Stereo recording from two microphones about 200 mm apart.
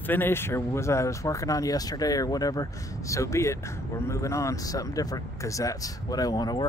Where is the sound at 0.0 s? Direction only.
10° left (ahead or behind).